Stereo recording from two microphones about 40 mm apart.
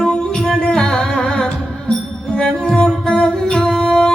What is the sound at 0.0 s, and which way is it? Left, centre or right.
Music, centre.